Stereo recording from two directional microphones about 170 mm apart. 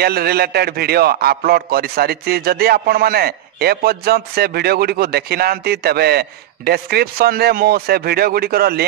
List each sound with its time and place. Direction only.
0.0 s a man's voice: 65° right (ahead or behind)